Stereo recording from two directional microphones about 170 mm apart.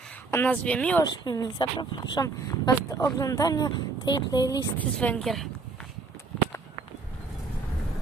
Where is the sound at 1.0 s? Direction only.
25° left (ahead or behind).